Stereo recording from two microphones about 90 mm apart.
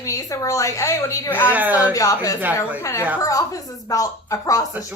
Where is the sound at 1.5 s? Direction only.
20° right (ahead or behind).